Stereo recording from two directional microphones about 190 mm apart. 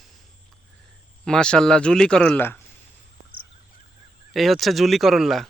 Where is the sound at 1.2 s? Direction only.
5° left (ahead or behind).